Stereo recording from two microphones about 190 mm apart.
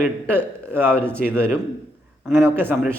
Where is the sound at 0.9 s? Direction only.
5° left (ahead or behind).